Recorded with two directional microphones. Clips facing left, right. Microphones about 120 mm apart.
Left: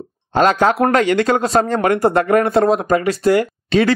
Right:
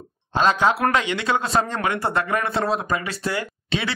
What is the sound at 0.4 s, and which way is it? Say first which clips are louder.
Speech: left 5 dB; 55° left (ahead or behind).